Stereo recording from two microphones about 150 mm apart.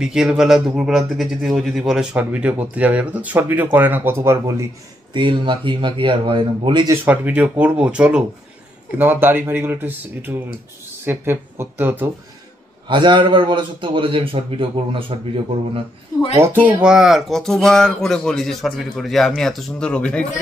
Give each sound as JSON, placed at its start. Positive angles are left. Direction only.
{"t": 0.0, "sound": "speech", "side_deg": -5}
{"t": 5.1, "sound": "a man's voice", "side_deg": -35}
{"t": 6.9, "sound": "speech", "side_deg": -10}
{"t": 12.8, "sound": "a man's voice", "side_deg": -30}
{"t": 16.3, "sound": "speech", "side_deg": -15}